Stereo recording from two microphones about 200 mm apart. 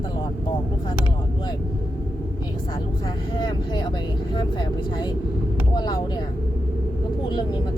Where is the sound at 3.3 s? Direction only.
20° left (ahead or behind).